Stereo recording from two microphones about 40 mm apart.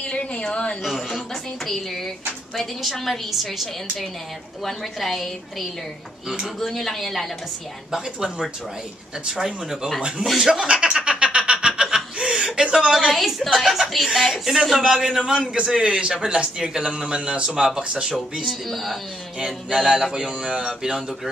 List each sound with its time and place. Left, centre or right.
0.0 s a woman's voice: left
0.8 s speech: centre
2.5 s a woman's voice: centre
4.6 s a woman's voice: centre
7.9 s speech: centre
10.7 s laughter: right
13.1 s a woman's voice: centre
15.2 s speech: right
18.5 s a woman's voice: centre
19.7 s speech: centre